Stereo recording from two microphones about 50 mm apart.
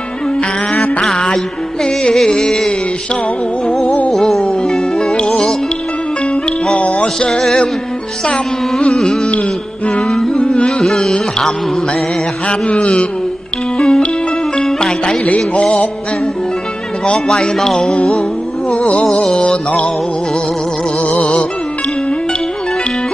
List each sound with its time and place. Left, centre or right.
2.0 s music: centre
4.2 s music: centre
6.7 s music: left
7.2 s music: centre
8.8 s carnatic music: centre
9.9 s music: centre
10.9 s a sound: centre
12.4 s music: left
13.7 s music: centre
17.0 s music: centre
18.7 s music: left
21.1 s music: left